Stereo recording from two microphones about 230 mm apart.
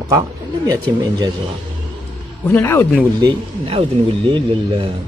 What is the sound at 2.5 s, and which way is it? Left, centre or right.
Speech, centre.